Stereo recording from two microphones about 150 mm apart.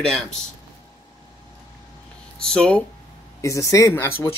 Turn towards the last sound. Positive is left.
turn(degrees=15)  # may be behind; listen again after turning